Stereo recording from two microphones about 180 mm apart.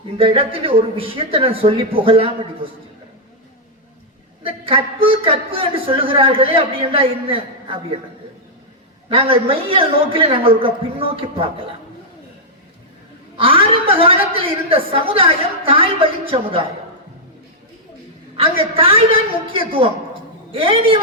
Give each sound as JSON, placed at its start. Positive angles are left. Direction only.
{"t": 0.2, "sound": "a man's voice", "side_deg": -30}
{"t": 4.4, "sound": "a man's voice", "side_deg": -30}
{"t": 9.0, "sound": "a man's voice", "side_deg": -30}
{"t": 13.3, "sound": "a man's voice", "side_deg": -30}
{"t": 18.3, "sound": "a woman's voice", "side_deg": -30}